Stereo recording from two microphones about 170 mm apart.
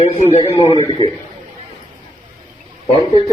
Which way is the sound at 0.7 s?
25° left (ahead or behind).